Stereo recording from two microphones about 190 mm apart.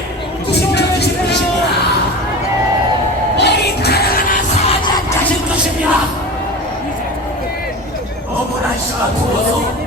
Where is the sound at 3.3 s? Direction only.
60° left (ahead or behind).